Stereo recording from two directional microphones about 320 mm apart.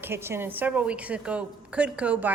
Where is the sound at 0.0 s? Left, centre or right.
Centre.